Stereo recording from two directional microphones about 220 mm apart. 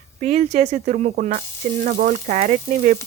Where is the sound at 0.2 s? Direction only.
30° right (ahead or behind).